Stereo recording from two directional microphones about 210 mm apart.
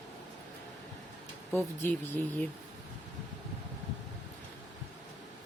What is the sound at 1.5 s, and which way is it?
Speech, 10° left (ahead or behind).